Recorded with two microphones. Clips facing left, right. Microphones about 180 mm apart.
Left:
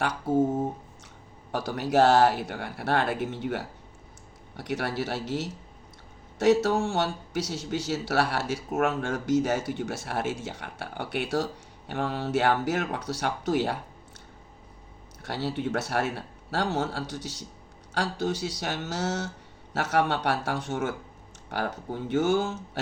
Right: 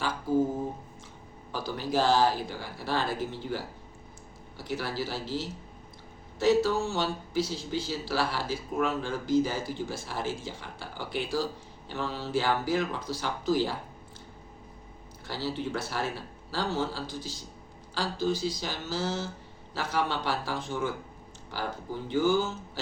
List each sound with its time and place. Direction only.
1.5 s speech: 70° left (ahead or behind)
6.4 s speech: 75° left (ahead or behind)
11.9 s speech: 55° left (ahead or behind)
15.3 s speech: 70° left (ahead or behind)